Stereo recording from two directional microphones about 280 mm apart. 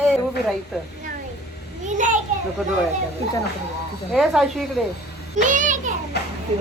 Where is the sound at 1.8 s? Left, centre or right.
Right.